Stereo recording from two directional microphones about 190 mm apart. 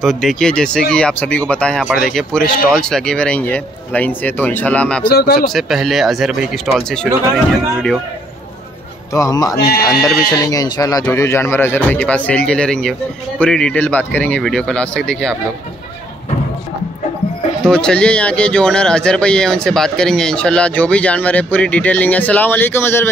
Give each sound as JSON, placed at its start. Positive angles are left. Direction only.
{"t": 0.0, "sound": "speech", "side_deg": 0}
{"t": 5.0, "sound": "speech", "side_deg": 55}
{"t": 5.5, "sound": "speech", "side_deg": 0}
{"t": 9.1, "sound": "speech", "side_deg": 20}
{"t": 17.6, "sound": "speech", "side_deg": 5}